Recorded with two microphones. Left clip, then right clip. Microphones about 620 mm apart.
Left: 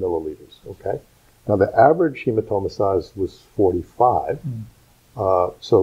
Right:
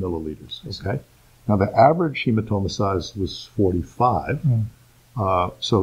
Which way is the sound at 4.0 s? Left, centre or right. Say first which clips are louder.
Left 3 dB; centre.